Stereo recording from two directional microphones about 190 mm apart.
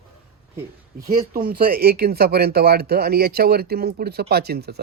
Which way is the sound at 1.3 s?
50° right (ahead or behind).